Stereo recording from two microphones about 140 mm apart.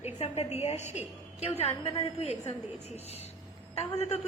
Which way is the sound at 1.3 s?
50° left (ahead or behind).